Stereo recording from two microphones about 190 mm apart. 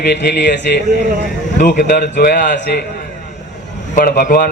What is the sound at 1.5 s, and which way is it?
Speech, 50° left (ahead or behind).